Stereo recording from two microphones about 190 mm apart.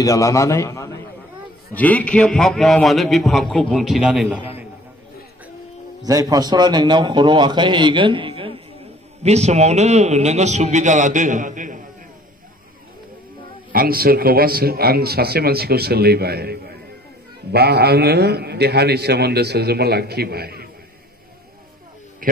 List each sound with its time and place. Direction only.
0.0 s a man's voice: 15° left (ahead or behind); by 4.4 s 5° right (ahead or behind)
6.0 s a man's voice: 20° right (ahead or behind); by 11.8 s 45° right (ahead or behind)
13.7 s a man's voice: 50° right (ahead or behind)
22.2 s a man's voice: 50° right (ahead or behind)